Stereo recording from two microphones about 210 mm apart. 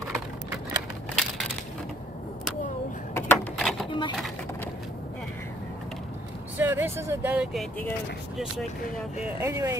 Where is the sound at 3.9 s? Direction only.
25° left (ahead or behind).